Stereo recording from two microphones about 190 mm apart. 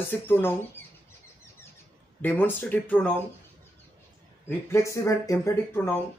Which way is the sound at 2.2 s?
10° left (ahead or behind).